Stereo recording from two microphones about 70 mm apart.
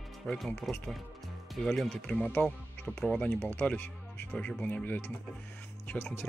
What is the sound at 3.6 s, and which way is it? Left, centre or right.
Speech, left.